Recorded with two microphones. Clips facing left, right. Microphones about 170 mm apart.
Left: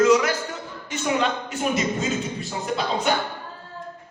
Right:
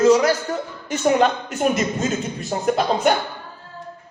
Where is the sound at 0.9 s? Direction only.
45° right (ahead or behind).